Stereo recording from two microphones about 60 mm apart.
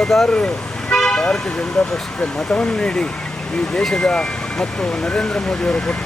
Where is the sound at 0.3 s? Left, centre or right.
Centre.